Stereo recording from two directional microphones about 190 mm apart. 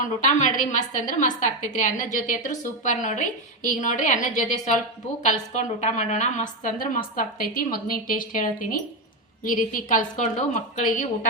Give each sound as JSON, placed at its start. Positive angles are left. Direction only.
{"t": 0.0, "sound": "a woman's voice", "side_deg": 40}